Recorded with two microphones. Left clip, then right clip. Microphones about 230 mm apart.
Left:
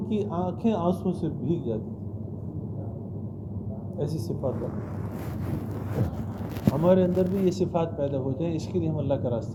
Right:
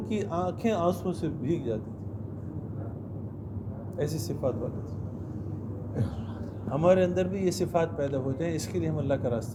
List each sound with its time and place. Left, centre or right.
0.0 s speech: right
3.9 s speech: right
6.8 s speech: right